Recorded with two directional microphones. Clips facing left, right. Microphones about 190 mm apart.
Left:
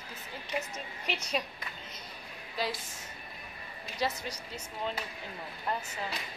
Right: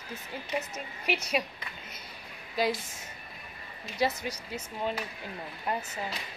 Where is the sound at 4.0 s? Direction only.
10° right (ahead or behind).